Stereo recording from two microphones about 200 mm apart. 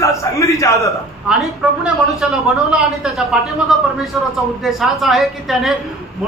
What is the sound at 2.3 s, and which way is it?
A man's voice, centre (ahead or behind).